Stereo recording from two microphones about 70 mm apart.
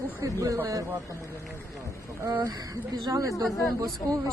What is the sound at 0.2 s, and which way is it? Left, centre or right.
Speech, right.